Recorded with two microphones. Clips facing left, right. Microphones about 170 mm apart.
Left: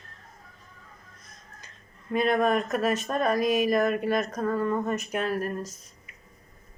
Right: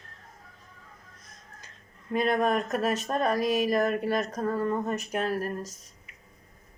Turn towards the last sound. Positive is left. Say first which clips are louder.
# left 1 dB
turn(degrees=-40)  # may be behind; listen again after turning